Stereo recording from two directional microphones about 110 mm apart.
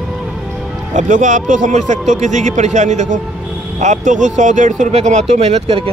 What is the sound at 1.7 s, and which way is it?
Speech, 90° right.